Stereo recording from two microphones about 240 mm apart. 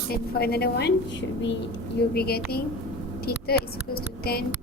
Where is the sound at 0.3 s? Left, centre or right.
Left.